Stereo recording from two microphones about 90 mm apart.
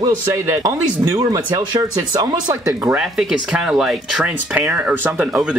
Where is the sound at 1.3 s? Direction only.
50° right (ahead or behind).